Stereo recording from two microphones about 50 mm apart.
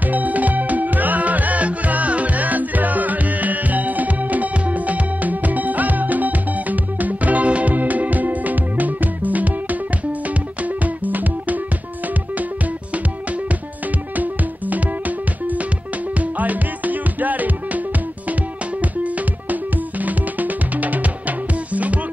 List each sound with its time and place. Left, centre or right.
0.0 s music: right
14.1 s music: right